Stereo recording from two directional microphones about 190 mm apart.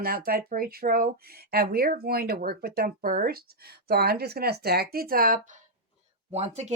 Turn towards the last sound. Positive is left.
turn(degrees=-35)  # may be behind; listen again after turning